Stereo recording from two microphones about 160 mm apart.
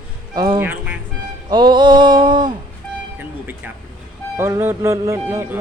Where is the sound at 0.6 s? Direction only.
10° right (ahead or behind).